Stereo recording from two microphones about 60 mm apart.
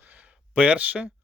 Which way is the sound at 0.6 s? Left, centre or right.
Right.